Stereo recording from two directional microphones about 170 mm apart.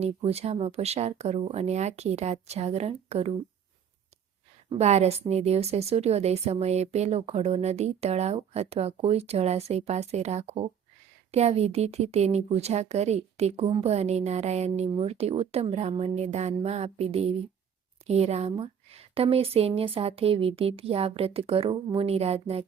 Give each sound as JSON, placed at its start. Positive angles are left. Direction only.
{"t": 0.2, "sound": "a woman's voice", "side_deg": -35}
{"t": 4.7, "sound": "a woman's voice", "side_deg": -40}